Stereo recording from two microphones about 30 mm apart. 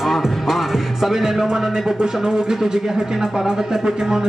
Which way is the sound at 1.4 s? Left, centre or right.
Right.